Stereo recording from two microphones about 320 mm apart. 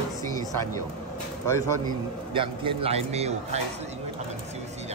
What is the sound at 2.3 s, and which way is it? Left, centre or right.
A man's voice, centre.